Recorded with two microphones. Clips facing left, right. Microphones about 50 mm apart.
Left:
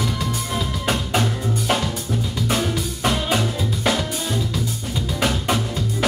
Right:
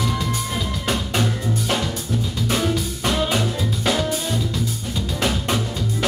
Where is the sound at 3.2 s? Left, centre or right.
Centre.